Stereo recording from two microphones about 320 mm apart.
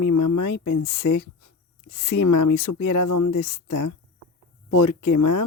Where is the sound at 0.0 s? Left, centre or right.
Left.